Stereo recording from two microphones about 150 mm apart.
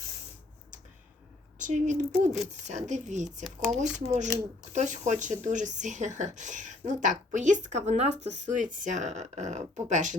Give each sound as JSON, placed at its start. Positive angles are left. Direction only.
{"t": 1.5, "sound": "speech", "side_deg": -55}